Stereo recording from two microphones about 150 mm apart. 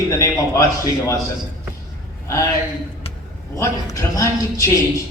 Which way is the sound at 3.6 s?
20° left (ahead or behind).